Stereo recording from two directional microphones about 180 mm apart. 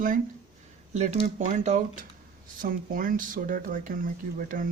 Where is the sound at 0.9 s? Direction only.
40° right (ahead or behind).